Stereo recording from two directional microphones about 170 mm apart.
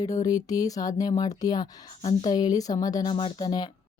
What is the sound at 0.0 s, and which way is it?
Speech, 20° left (ahead or behind).